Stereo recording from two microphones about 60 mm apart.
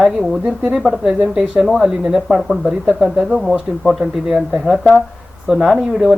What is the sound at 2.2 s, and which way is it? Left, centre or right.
Speech, centre.